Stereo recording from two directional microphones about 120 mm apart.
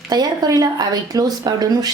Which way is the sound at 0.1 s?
30° right (ahead or behind).